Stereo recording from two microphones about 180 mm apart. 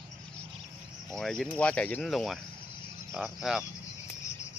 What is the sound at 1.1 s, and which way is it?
Speech, centre (ahead or behind).